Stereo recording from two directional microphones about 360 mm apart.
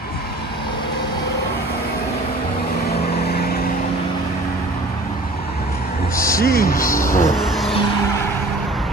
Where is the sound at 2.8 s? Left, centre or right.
Left.